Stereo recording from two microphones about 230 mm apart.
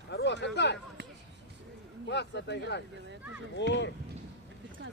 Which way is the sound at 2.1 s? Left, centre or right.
Left.